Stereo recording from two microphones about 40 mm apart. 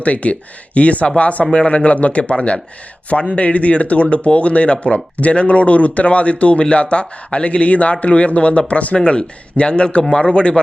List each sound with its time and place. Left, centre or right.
0.0 s speech: left